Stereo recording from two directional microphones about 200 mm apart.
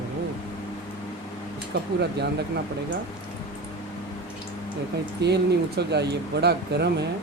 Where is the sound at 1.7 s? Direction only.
50° right (ahead or behind).